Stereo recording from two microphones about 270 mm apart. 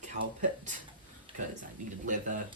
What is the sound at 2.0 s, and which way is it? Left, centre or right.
Speech, right.